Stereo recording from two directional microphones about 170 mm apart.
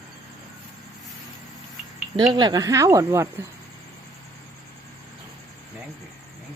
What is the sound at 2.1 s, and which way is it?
Speech, 25° right (ahead or behind).